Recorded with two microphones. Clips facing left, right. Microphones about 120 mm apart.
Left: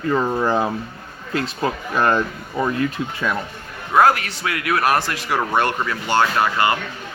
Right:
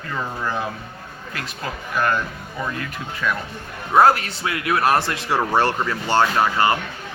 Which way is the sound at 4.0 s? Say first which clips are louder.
Even; 30° right (ahead or behind).